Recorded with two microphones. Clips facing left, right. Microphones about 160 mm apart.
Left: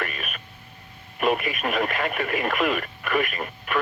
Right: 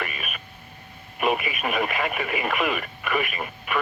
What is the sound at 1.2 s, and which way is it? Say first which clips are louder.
Speech: left 1 dB; 5° right (ahead or behind).